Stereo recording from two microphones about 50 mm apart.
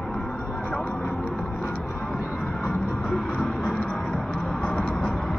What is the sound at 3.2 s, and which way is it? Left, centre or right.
Vehicle, left.